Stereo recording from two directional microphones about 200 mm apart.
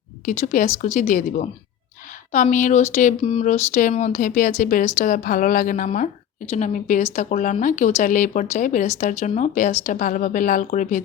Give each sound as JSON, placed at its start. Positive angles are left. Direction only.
{"t": 0.3, "sound": "speech", "side_deg": 40}